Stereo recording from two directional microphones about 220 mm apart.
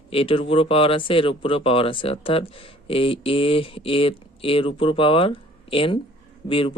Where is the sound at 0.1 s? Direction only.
25° left (ahead or behind).